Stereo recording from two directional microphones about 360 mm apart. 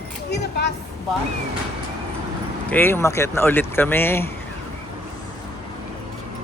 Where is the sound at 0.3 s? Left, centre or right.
Left.